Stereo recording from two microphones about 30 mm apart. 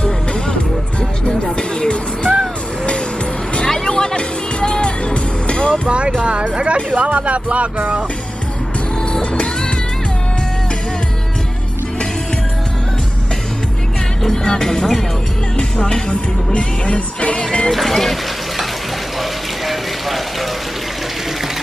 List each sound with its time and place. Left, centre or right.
0.0 s music: left
3.6 s music: left
5.9 s a sound: right
6.2 s speech: right
9.2 s music: left
14.2 s music: centre
15.9 s music: left
17.6 s speech: centre
19.6 s a sound: centre